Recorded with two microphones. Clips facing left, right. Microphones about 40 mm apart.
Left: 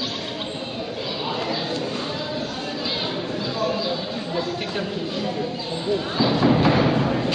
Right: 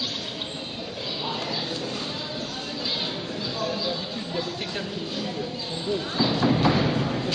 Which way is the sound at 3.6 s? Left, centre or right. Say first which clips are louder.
Left 4 dB; centre.